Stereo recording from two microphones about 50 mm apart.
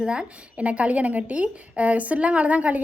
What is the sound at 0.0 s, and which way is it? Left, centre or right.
A woman's voice, centre.